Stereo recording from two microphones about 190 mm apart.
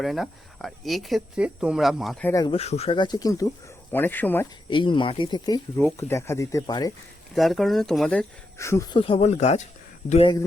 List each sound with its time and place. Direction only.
0.0 s speech: centre (ahead or behind)
2.2 s speech: 15° left (ahead or behind)
2.5 s speech: 35° left (ahead or behind); by 4.4 s 10° left (ahead or behind)
4.7 s speech: 25° left (ahead or behind)
7.3 s speech: centre (ahead or behind)
8.5 s speech: 15° left (ahead or behind); by 10.3 s 30° left (ahead or behind)